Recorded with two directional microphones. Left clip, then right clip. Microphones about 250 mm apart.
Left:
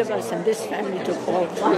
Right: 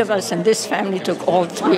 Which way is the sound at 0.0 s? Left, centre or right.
Right.